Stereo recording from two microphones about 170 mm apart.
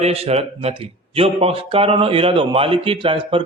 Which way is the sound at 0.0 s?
35° right (ahead or behind).